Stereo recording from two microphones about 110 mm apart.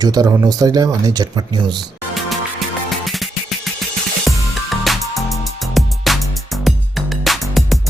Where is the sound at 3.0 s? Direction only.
Centre (ahead or behind).